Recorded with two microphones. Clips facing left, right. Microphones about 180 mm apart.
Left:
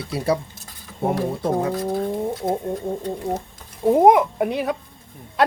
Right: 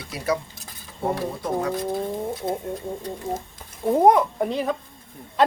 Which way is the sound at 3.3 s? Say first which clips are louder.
Left 3 dB; 65° left (ahead or behind).